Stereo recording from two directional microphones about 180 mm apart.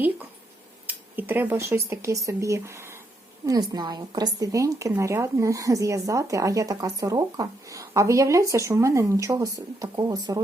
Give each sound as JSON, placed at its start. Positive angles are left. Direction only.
{"t": 0.9, "sound": "a woman's voice", "side_deg": -10}